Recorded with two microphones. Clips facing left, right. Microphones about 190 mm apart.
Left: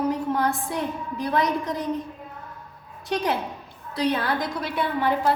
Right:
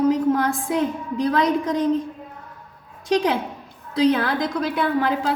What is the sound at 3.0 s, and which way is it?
A woman's voice, 90° right.